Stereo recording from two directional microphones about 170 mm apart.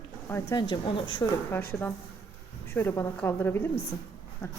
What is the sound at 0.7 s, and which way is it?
Speech, 30° left (ahead or behind).